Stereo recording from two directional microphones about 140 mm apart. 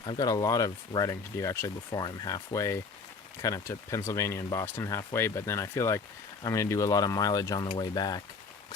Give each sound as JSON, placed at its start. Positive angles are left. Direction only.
{"t": 0.0, "sound": "speech", "side_deg": 30}